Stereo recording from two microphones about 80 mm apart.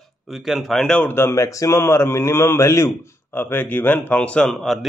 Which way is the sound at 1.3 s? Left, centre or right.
Left.